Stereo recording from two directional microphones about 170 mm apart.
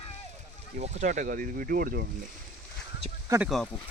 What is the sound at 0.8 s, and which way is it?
Speech, 45° right (ahead or behind).